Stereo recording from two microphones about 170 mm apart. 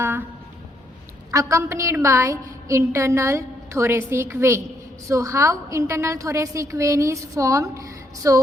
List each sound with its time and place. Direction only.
1.3 s a woman's voice: 20° right (ahead or behind)